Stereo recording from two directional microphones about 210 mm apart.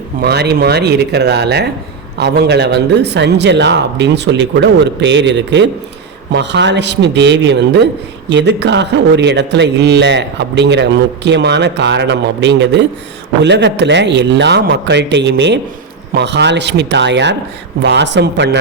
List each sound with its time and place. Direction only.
0.2 s a man's voice: 50° right (ahead or behind)